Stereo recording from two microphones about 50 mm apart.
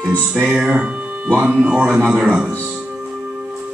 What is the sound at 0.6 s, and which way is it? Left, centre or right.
Speech, right.